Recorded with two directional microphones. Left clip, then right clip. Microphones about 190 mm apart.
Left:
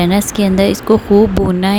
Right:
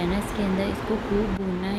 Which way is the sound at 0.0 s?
50° left (ahead or behind).